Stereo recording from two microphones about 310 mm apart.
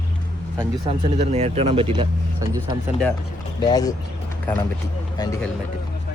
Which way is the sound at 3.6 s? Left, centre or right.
Centre.